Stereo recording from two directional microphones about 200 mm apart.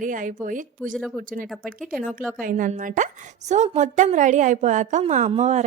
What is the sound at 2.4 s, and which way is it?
A woman's voice, 40° right (ahead or behind).